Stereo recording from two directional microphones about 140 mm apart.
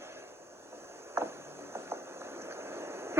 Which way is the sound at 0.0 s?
20° right (ahead or behind).